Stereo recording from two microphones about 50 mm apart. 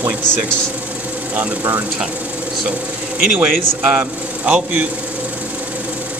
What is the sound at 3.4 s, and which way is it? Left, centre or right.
Speech, right.